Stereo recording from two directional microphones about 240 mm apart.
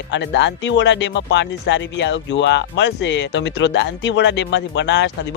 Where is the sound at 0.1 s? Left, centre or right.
Left.